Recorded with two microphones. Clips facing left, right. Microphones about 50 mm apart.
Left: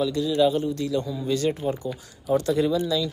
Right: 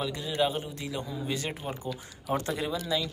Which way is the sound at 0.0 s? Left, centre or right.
Right.